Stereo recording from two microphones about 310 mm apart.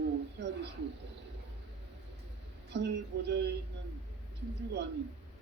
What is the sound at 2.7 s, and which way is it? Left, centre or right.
Speech, right.